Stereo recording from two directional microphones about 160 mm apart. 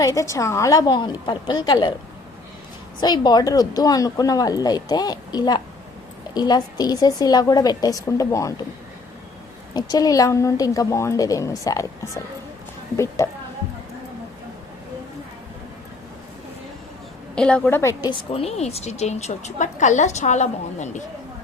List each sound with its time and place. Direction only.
0.0 s speech: 20° left (ahead or behind)
3.0 s speech: 25° left (ahead or behind)
9.7 s speech: 25° left (ahead or behind)
17.3 s a woman's voice: 5° left (ahead or behind)
18.0 s a woman's voice: 35° left (ahead or behind)